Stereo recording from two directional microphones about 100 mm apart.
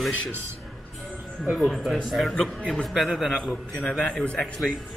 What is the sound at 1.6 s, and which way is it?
A man's voice, centre (ahead or behind).